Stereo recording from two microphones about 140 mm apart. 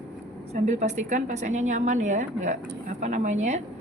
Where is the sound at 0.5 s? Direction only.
55° right (ahead or behind).